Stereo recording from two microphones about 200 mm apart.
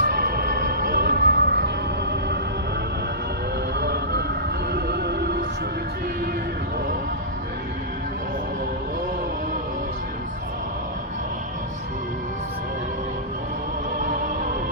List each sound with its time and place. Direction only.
0.0 s music: 50° right (ahead or behind)
3.8 s music: 55° right (ahead or behind)